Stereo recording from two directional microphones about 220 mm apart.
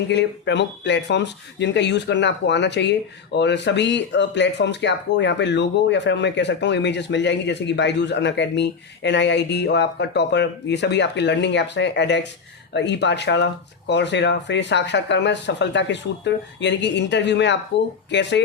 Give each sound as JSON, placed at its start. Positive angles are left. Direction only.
{"t": 0.1, "sound": "speech", "side_deg": 55}